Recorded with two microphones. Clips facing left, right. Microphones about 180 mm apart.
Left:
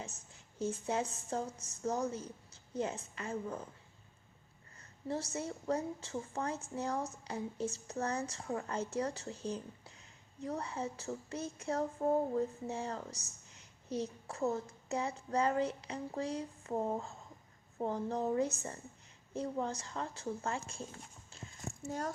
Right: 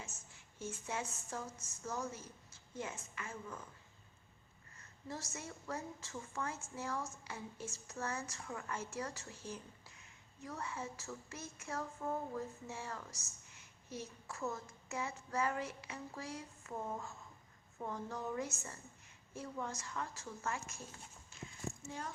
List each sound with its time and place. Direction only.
0.6 s speech: 35° left (ahead or behind)
4.8 s speech: 35° left (ahead or behind)
21.8 s speech: 40° left (ahead or behind)